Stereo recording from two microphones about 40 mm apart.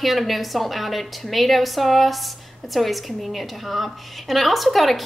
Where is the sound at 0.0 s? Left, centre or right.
Centre.